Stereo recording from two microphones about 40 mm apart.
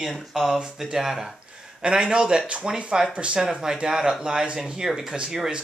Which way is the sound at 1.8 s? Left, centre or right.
Right.